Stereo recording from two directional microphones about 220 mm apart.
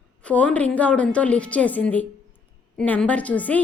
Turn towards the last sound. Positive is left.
turn(degrees=5)  # may be behind; listen again after turning